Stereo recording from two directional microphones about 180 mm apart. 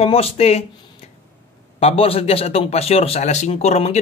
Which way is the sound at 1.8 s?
35° left (ahead or behind).